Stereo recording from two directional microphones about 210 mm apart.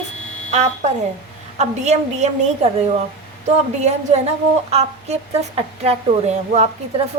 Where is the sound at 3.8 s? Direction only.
30° right (ahead or behind).